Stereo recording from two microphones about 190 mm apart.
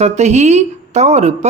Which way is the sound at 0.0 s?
35° right (ahead or behind).